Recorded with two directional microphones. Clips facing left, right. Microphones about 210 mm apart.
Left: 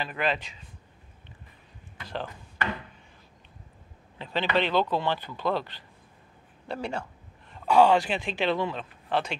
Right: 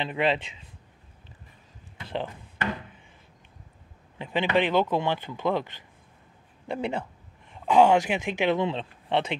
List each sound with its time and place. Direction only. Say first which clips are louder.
0.0 s speech: right 4 dB; 25° right (ahead or behind)
2.0 s chop: right 3 dB; 25° right (ahead or behind)
4.2 s speech: right 2 dB; 15° right (ahead or behind)
6.7 s speech: right 3 dB; 20° right (ahead or behind)